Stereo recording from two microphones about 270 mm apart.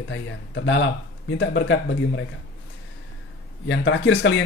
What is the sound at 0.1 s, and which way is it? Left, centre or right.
Speech, left.